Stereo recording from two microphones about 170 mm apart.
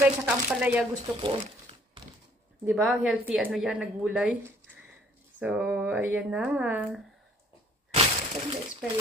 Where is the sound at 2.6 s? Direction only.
5° right (ahead or behind).